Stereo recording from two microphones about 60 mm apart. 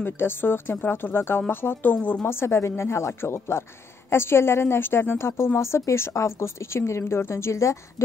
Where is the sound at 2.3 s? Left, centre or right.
Left.